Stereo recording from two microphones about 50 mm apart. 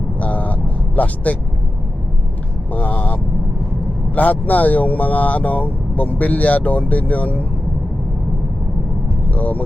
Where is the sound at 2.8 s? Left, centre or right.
Left.